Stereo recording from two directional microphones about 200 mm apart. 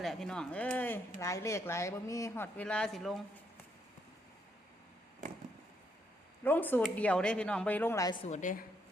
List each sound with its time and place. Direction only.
0.0 s a woman's voice: centre (ahead or behind)
6.4 s a woman's voice: 10° left (ahead or behind)
8.2 s a woman's voice: 35° left (ahead or behind)